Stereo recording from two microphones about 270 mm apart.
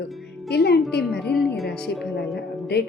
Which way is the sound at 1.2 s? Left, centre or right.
Centre.